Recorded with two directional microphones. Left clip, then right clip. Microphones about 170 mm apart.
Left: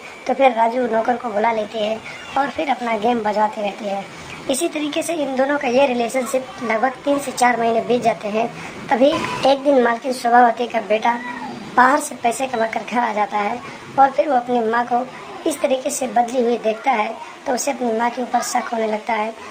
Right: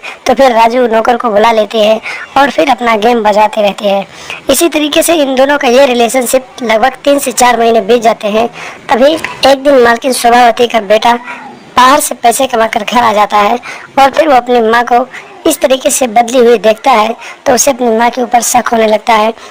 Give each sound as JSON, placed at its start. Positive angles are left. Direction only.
{"t": 0.3, "sound": "a woman's voice", "side_deg": -40}